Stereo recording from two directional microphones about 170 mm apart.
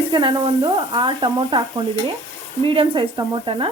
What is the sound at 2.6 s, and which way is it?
A woman's voice, 30° right (ahead or behind).